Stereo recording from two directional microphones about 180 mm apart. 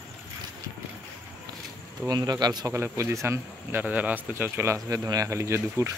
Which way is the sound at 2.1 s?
20° right (ahead or behind).